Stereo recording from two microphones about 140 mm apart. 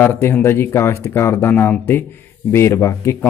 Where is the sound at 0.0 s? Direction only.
15° left (ahead or behind).